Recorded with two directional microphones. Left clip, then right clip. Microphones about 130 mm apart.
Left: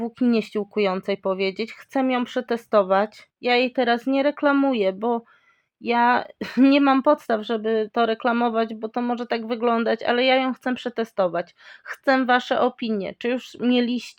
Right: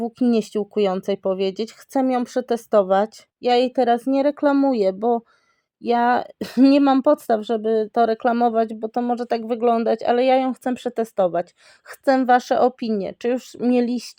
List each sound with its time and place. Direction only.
0.0 s speech: 45° right (ahead or behind)